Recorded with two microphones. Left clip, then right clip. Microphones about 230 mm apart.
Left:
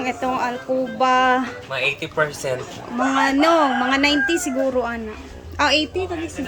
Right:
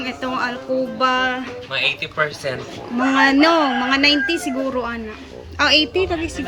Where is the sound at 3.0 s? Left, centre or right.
Centre.